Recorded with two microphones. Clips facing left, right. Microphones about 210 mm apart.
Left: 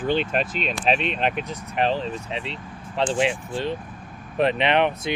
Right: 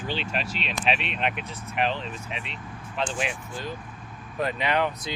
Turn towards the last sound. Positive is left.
turn(degrees=20)  # may be behind; listen again after turning